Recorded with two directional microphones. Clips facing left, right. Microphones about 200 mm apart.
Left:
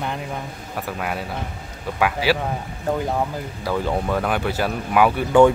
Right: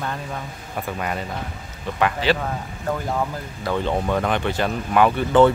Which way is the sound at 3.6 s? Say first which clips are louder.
Even; 5° left (ahead or behind).